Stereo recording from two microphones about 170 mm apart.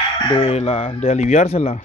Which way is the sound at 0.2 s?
30° left (ahead or behind).